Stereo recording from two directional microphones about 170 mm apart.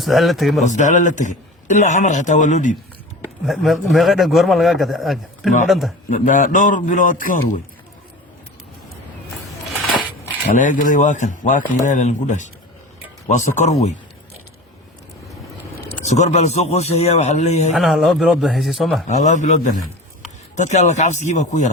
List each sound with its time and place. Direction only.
0.0 s a man's voice: centre (ahead or behind)
0.7 s a man's voice: 45° left (ahead or behind)
3.4 s a man's voice: centre (ahead or behind)
6.1 s a man's voice: 50° left (ahead or behind)
9.7 s a sound: 5° left (ahead or behind)
10.5 s a man's voice: 50° left (ahead or behind)
16.0 s speech: 40° left (ahead or behind)
17.7 s a man's voice: centre (ahead or behind)
19.0 s a man's voice: 45° left (ahead or behind)